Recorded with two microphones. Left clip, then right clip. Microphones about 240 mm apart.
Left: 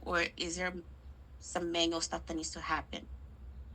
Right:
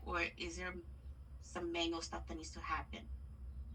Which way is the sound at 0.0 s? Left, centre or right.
Left.